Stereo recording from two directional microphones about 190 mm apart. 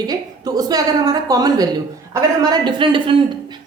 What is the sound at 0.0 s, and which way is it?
A woman's voice, 20° right (ahead or behind).